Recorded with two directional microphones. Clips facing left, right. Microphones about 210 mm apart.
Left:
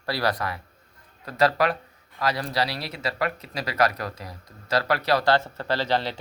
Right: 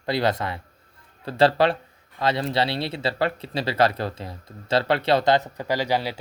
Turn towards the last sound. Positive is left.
turn(degrees=-10)  # may be behind; listen again after turning